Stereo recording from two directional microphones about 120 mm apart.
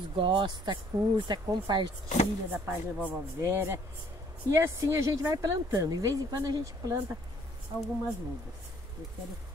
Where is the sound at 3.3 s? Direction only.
20° right (ahead or behind).